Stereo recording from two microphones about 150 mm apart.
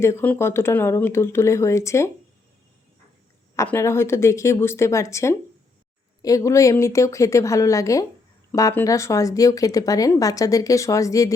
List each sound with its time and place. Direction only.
0.0 s speech: 15° left (ahead or behind)
3.5 s speech: 20° left (ahead or behind)